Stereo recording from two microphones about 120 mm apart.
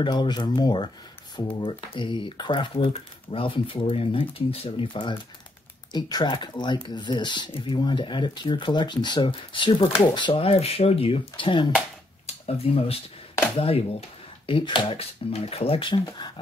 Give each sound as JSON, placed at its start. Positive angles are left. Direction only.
{"t": 0.0, "sound": "speech", "side_deg": 40}
{"t": 12.3, "sound": "speech", "side_deg": 55}
{"t": 14.4, "sound": "speech", "side_deg": 45}